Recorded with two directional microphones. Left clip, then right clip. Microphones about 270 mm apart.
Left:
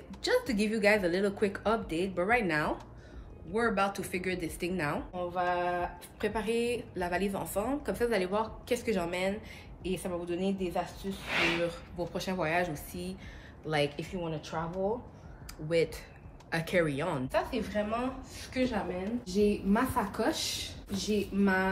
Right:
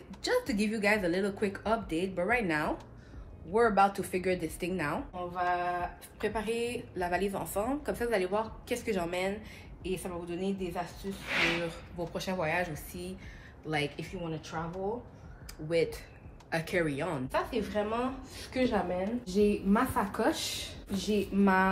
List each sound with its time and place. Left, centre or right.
0.1 s speech: centre
3.5 s a woman's voice: centre
17.3 s a woman's voice: centre
21.0 s speech: right